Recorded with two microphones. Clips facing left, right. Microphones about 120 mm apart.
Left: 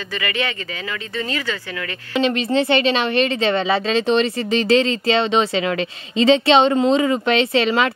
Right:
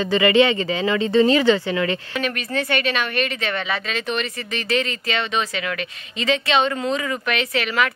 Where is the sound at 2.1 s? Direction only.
25° left (ahead or behind).